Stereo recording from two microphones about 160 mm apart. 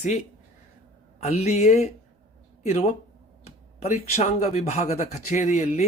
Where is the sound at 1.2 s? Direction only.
45° left (ahead or behind).